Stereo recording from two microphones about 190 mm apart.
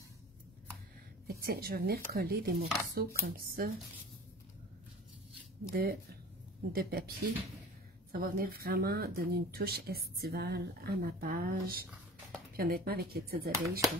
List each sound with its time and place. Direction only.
1.2 s a woman's voice: 50° right (ahead or behind)
5.7 s speech: 50° right (ahead or behind)